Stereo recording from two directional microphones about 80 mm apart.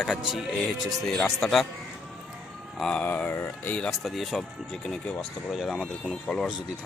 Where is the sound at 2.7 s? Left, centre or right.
Centre.